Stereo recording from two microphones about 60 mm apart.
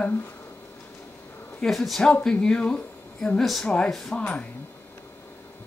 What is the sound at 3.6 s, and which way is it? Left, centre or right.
Speech, centre.